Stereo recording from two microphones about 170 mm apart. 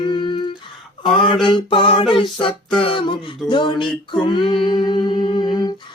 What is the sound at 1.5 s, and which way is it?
Mantra, 30° left (ahead or behind).